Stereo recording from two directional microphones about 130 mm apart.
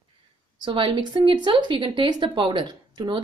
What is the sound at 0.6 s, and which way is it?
Speech, 40° right (ahead or behind).